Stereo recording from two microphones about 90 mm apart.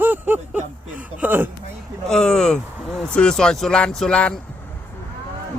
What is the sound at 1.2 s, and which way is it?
Speech, 20° right (ahead or behind).